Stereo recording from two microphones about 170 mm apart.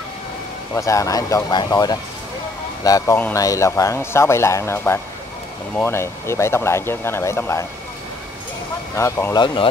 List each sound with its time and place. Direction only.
0.7 s speech: 20° left (ahead or behind)
8.9 s speech: 15° left (ahead or behind)